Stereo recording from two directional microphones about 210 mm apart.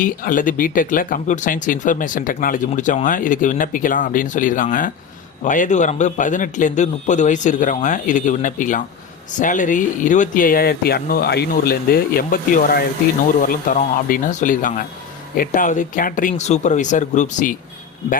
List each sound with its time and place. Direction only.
0.0 s speech: 40° left (ahead or behind)